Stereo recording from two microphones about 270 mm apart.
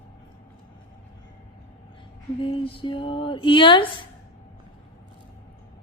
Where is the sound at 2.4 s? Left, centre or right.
Centre.